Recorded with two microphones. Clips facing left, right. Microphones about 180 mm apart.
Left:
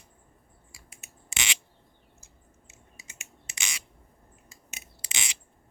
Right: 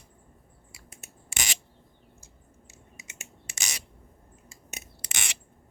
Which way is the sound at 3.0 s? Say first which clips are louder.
Right 1 dB; 20° right (ahead or behind).